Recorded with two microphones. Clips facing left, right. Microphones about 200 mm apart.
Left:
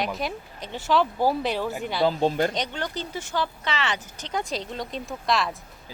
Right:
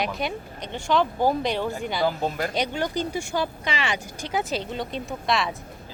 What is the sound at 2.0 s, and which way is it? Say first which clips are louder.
Speech: left 4 dB; 30° left (ahead or behind).